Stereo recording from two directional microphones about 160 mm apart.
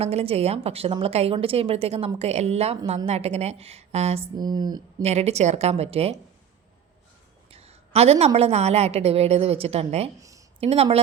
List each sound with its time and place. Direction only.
0.0 s a woman's voice: 40° right (ahead or behind)
4.4 s speech: 25° right (ahead or behind)
5.0 s a woman's voice: 40° right (ahead or behind)
7.5 s a sound: 40° right (ahead or behind)
8.4 s a woman's voice: 40° right (ahead or behind)
10.2 s a sound: 20° right (ahead or behind)
10.6 s a woman's voice: 40° right (ahead or behind)